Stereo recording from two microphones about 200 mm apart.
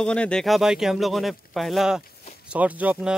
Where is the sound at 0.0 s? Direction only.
5° left (ahead or behind).